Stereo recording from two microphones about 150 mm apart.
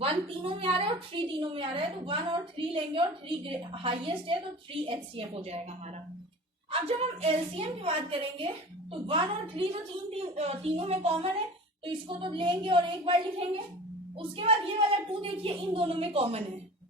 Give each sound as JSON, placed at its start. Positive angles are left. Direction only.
{"t": 0.0, "sound": "a woman's voice", "side_deg": -40}
{"t": 6.7, "sound": "a woman's voice", "side_deg": -40}